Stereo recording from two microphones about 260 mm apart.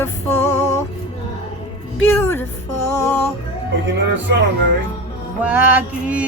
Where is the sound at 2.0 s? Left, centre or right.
Centre.